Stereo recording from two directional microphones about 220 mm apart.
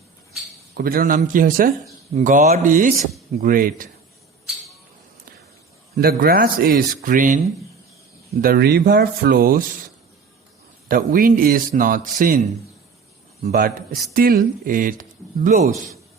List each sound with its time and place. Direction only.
0.7 s speech: 45° right (ahead or behind)
6.0 s speech: 45° right (ahead or behind)
8.4 s speech: 45° right (ahead or behind)
10.8 s speech: 40° right (ahead or behind)